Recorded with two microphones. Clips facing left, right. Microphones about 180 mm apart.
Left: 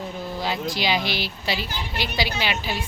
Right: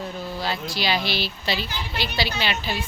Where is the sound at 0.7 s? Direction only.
15° left (ahead or behind).